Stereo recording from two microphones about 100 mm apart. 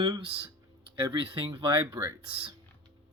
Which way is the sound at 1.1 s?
55° right (ahead or behind).